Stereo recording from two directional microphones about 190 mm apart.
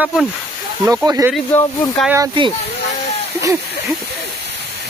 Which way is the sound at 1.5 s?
10° left (ahead or behind).